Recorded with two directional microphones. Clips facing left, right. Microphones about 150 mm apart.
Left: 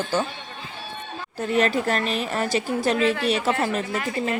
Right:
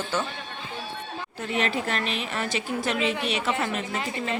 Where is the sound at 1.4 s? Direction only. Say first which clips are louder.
Left 6 dB; 40° left (ahead or behind).